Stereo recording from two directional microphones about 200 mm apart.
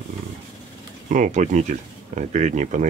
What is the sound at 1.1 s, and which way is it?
Speech, 40° right (ahead or behind).